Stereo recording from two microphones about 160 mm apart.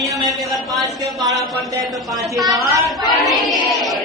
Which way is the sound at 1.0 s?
20° right (ahead or behind).